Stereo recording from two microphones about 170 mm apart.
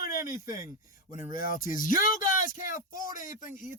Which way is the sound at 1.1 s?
50° left (ahead or behind).